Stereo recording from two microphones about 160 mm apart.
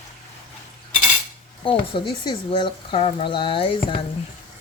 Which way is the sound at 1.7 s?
30° left (ahead or behind).